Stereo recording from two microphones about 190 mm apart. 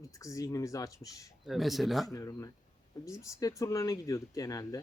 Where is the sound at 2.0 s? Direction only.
20° left (ahead or behind).